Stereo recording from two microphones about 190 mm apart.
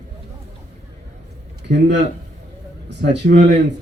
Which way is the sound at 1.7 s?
65° right (ahead or behind).